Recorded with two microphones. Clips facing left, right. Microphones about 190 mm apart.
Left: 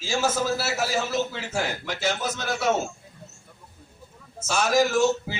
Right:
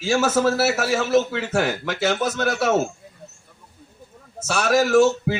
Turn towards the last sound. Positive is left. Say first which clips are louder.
# right 6 dB
turn(degrees=-70)  # may be behind; listen again after turning